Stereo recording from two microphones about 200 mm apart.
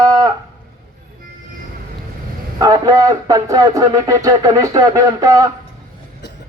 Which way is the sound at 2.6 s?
15° right (ahead or behind).